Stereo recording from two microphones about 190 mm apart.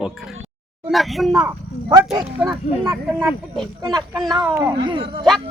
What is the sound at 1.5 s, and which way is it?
Speech, 15° right (ahead or behind).